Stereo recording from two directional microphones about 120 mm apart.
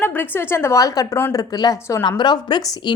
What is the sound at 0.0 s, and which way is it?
A woman's voice, 15° left (ahead or behind).